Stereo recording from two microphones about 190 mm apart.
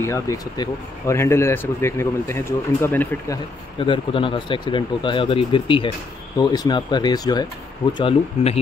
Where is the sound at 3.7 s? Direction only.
25° left (ahead or behind).